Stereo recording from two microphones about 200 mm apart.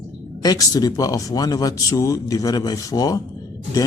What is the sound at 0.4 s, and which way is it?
Speech, 20° left (ahead or behind).